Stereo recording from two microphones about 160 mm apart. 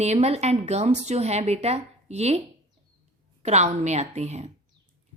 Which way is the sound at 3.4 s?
45° right (ahead or behind).